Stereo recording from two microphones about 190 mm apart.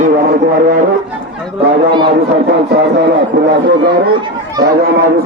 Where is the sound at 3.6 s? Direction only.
65° right (ahead or behind).